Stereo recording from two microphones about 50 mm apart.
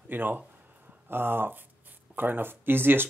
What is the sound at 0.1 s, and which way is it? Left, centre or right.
Speech, right.